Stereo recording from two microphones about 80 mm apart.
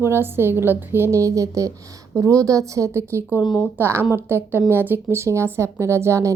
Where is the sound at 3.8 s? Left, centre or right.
Right.